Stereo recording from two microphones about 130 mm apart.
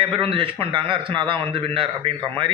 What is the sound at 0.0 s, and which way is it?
Speech, 45° right (ahead or behind).